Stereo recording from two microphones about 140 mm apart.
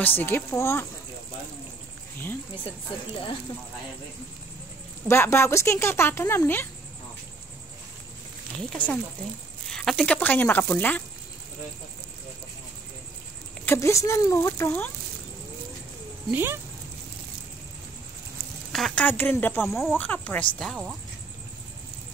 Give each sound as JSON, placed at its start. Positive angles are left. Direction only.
{"t": 0.0, "sound": "speech", "side_deg": 15}
{"t": 5.0, "sound": "speech", "side_deg": 20}
{"t": 8.6, "sound": "speech", "side_deg": 5}
{"t": 13.7, "sound": "speech", "side_deg": 20}
{"t": 16.3, "sound": "speech", "side_deg": -15}
{"t": 18.7, "sound": "speech", "side_deg": 0}
{"t": 19.0, "sound": "speech", "side_deg": 15}
{"t": 19.6, "sound": "speech", "side_deg": 0}